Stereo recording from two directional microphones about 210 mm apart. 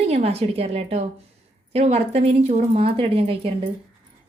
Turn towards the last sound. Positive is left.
turn(degrees=-25)  # may be behind; listen again after turning